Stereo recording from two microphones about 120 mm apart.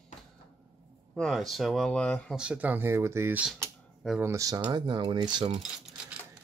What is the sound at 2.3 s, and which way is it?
Speech, 10° right (ahead or behind).